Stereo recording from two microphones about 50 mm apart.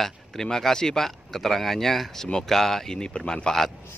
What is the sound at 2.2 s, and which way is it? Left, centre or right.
Speech, centre.